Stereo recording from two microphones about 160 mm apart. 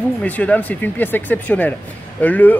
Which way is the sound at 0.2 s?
10° left (ahead or behind).